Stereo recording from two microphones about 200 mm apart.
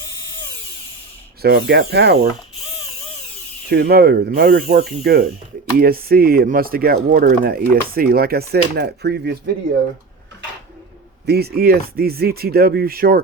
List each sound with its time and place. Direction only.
1.4 s speech: 50° right (ahead or behind)
3.7 s speech: 50° right (ahead or behind)
11.3 s speech: 50° right (ahead or behind)